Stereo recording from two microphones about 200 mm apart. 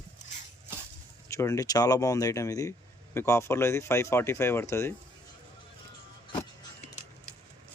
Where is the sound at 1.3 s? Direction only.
15° left (ahead or behind).